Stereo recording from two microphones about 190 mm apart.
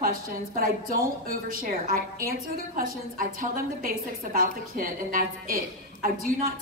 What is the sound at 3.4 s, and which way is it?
A woman's voice, 50° right (ahead or behind).